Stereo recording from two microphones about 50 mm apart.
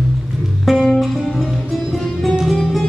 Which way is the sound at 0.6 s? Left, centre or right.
Centre.